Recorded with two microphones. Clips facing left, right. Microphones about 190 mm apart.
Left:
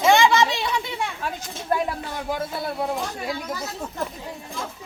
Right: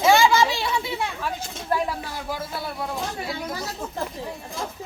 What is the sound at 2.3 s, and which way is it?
Speech, 25° left (ahead or behind).